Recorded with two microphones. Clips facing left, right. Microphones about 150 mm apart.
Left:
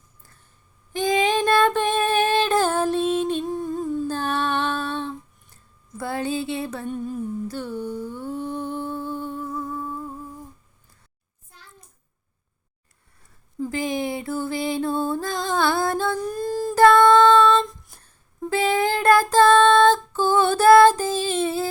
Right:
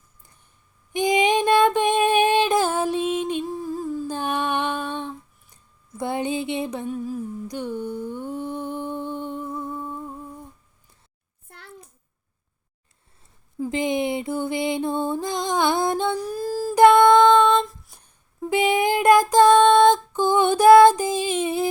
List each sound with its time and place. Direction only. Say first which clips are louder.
0.9 s female singing: right 1 dB; 20° right (ahead or behind)
3.4 s a sound: left 2 dB; centre (ahead or behind)
4.1 s female singing: even; 15° right (ahead or behind)
6.0 s a sound: right 1 dB; 20° right (ahead or behind)
6.8 s humming: even; 5° right (ahead or behind)
7.4 s humming: even; 15° right (ahead or behind)
11.4 s a sound: right 5 dB; 65° right (ahead or behind)
13.7 s music: right 3 dB; 20° right (ahead or behind)
16.2 s singing: left 1 dB; 5° right (ahead or behind)
16.7 s female singing: right 1 dB; 15° right (ahead or behind)